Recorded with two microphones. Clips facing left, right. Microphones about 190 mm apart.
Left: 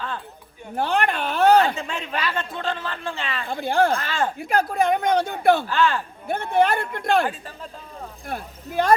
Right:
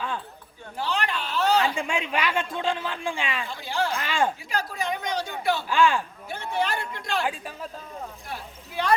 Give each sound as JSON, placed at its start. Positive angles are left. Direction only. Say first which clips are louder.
{"t": 0.8, "sound": "a sound", "louder": "left 6 dB", "side_deg": 55}
{"t": 1.7, "sound": "speech", "louder": "right 2 dB", "side_deg": -10}
{"t": 3.4, "sound": "speech", "louder": "left 12 dB", "side_deg": 55}
{"t": 3.9, "sound": "speech", "louder": "left 1 dB", "side_deg": -10}
{"t": 4.4, "sound": "a woman's voice", "louder": "left 9 dB", "side_deg": 55}
{"t": 5.6, "sound": "speech", "louder": "even", "side_deg": -10}
{"t": 6.2, "sound": "a woman's voice", "louder": "left 11 dB", "side_deg": 55}
{"t": 8.3, "sound": "speech", "louder": "left 6 dB", "side_deg": 45}